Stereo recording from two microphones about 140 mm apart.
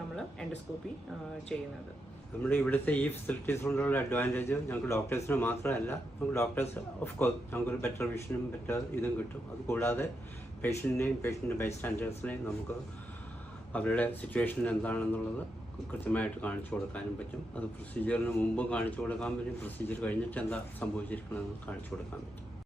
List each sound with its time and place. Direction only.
1.5 s speech: 5° left (ahead or behind)
13.7 s speech: 10° left (ahead or behind)
18.0 s speech: 10° left (ahead or behind)